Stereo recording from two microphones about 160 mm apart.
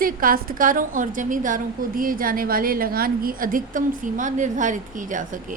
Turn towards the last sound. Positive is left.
turn(degrees=-55)  # may be behind; listen again after turning